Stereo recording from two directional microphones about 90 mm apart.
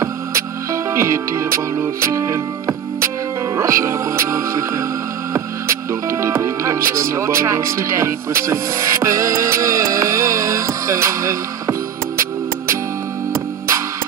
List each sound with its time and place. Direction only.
0.9 s speech: 35° right (ahead or behind)